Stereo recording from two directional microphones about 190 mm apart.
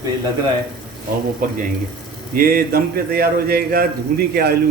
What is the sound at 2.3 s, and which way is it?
Speech, 50° right (ahead or behind).